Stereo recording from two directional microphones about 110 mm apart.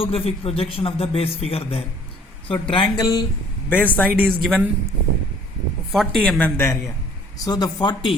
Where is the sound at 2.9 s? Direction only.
35° left (ahead or behind).